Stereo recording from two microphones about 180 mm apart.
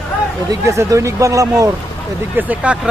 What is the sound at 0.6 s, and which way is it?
Speech, 15° right (ahead or behind).